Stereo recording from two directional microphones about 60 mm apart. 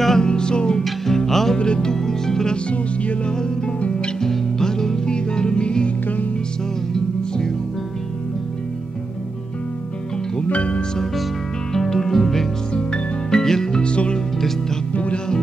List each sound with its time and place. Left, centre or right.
0.0 s music: centre
3.3 s music: centre
6.0 s music: left
10.5 s music: left
11.7 s music: centre; by 15.3 s left